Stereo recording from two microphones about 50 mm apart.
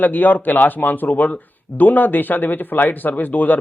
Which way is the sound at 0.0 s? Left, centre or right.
Left.